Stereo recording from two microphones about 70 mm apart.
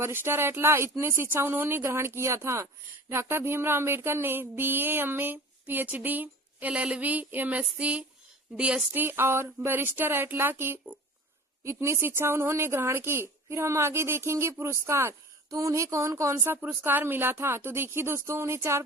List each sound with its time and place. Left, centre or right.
0.0 s a woman's voice: right
3.1 s a sound: right; by 8.0 s centre
8.5 s speech: centre
8.9 s a woman's voice: right
15.4 s speech: right
16.6 s a woman's voice: right